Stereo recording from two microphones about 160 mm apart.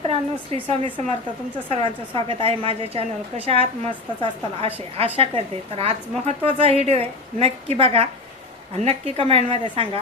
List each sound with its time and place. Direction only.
0.1 s a woman's voice: 35° right (ahead or behind)